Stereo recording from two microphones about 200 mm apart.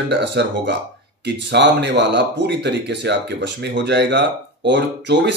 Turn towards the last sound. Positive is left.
turn(degrees=-60)  # may be behind; listen again after turning